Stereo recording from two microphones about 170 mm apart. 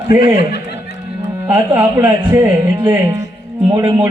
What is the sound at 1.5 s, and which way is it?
Speech, 15° right (ahead or behind).